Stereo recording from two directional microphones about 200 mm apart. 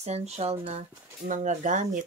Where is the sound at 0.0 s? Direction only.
35° right (ahead or behind).